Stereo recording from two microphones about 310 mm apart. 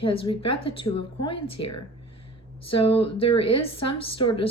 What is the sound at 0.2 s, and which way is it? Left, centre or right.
Speech, centre.